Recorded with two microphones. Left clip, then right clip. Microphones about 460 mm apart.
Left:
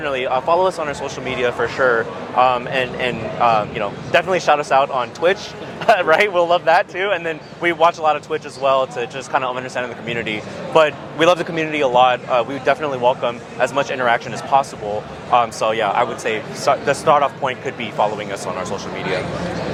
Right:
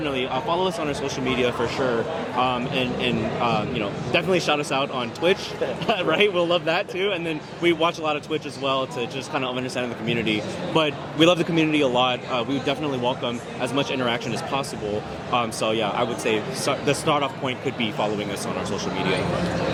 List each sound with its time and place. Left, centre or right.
0.0 s speech: left